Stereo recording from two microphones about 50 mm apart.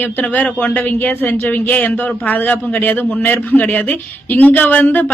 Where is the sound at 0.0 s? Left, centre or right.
Left.